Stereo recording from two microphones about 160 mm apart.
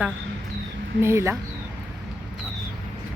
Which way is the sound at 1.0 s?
15° right (ahead or behind).